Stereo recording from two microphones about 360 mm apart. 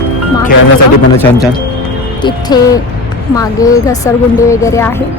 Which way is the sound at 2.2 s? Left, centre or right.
Centre.